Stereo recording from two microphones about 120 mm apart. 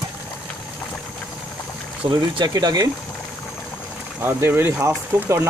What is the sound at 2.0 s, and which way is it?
Speech, 40° right (ahead or behind).